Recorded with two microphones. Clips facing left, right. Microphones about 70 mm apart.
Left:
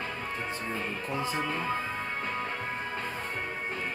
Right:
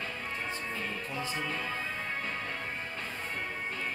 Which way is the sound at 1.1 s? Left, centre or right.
Left.